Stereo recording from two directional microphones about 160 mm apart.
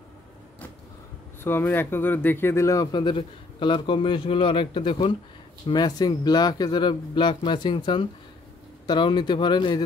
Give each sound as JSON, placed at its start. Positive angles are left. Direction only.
{"t": 1.4, "sound": "speech", "side_deg": 15}